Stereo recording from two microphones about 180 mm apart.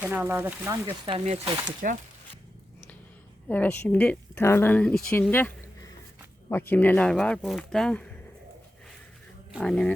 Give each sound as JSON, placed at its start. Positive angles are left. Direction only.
{"t": 0.0, "sound": "speech", "side_deg": -10}
{"t": 1.1, "sound": "speech", "side_deg": -30}
{"t": 1.8, "sound": "speech", "side_deg": -50}
{"t": 3.5, "sound": "speech", "side_deg": 10}
{"t": 9.5, "sound": "speech", "side_deg": 0}